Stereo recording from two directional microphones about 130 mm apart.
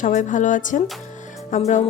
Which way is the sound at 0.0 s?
75° left (ahead or behind).